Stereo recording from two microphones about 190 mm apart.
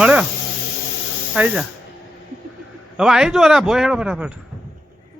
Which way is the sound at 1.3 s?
5° right (ahead or behind).